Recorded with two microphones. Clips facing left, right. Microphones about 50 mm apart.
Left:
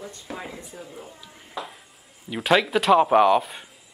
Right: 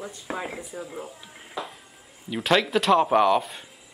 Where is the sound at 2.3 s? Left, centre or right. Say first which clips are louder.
Left 2 dB; centre.